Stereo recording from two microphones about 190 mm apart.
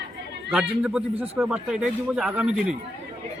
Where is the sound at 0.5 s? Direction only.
5° right (ahead or behind).